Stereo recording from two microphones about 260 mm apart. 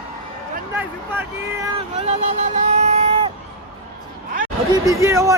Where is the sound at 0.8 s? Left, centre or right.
Centre.